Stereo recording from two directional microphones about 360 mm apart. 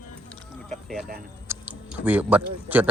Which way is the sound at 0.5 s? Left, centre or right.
Centre.